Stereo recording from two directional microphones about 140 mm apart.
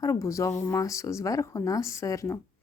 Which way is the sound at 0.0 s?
25° left (ahead or behind).